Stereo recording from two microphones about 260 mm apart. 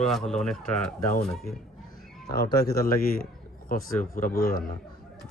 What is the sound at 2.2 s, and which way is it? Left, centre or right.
A man's voice, left.